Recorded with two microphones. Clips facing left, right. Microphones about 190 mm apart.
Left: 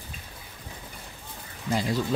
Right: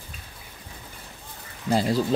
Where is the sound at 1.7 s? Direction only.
35° right (ahead or behind).